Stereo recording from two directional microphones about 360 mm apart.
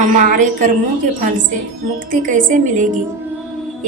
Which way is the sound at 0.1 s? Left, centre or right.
Right.